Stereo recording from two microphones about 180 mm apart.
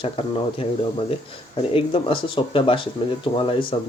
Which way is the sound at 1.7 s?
30° left (ahead or behind).